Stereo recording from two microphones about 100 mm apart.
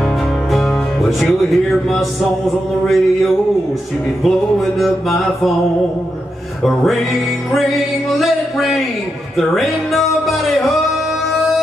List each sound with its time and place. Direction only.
0.5 s music: centre (ahead or behind)
4.2 s music: centre (ahead or behind)
6.6 s music: centre (ahead or behind)